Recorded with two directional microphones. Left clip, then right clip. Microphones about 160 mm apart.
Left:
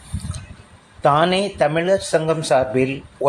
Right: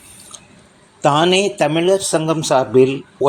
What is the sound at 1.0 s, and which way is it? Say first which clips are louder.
A man's voice: right 2 dB; 25° right (ahead or behind).